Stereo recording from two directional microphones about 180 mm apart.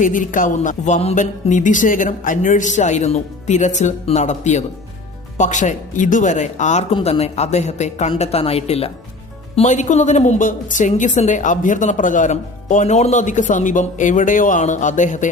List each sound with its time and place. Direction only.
0.0 s a woman's voice: 45° left (ahead or behind)